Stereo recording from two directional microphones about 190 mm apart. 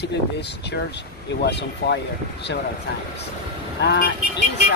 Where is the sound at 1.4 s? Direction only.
65° left (ahead or behind).